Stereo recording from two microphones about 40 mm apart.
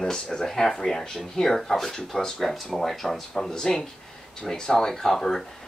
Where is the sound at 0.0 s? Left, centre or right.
Centre.